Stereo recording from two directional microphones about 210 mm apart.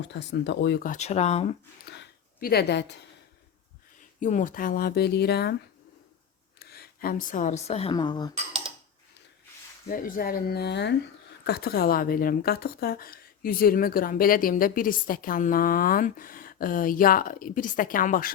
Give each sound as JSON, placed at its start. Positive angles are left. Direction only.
{"t": 0.0, "sound": "a woman's voice", "side_deg": 55}
{"t": 1.9, "sound": "a sound", "side_deg": 50}
{"t": 4.2, "sound": "a woman's voice", "side_deg": 35}
{"t": 6.6, "sound": "a woman's voice", "side_deg": 50}
{"t": 9.8, "sound": "a woman's voice", "side_deg": 40}